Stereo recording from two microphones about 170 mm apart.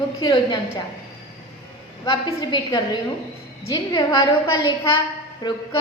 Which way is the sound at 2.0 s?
30° left (ahead or behind).